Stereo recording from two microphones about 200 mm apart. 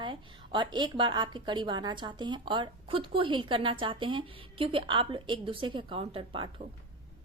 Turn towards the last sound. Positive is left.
turn(degrees=-25)  # may be behind; listen again after turning